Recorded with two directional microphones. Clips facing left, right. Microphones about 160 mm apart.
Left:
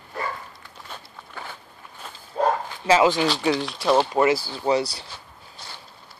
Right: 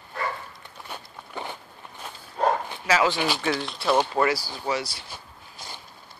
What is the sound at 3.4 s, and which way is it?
Speech, 15° left (ahead or behind).